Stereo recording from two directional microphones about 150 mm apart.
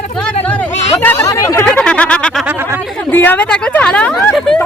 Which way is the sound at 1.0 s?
15° left (ahead or behind).